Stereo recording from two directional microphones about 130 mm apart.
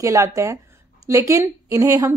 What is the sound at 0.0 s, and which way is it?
A woman's voice, 25° right (ahead or behind).